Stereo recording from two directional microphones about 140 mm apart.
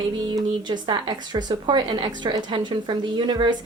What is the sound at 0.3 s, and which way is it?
A woman's voice, 30° right (ahead or behind).